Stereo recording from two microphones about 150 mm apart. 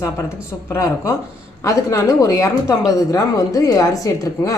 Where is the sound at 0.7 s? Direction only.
20° left (ahead or behind).